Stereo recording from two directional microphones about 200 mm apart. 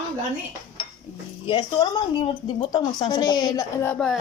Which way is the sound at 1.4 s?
20° left (ahead or behind).